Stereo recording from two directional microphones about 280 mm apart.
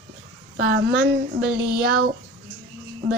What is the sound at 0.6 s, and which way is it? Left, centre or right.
Speech, right.